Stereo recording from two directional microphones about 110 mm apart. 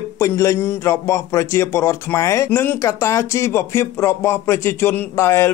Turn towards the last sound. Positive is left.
turn(degrees=25)  # may be behind; listen again after turning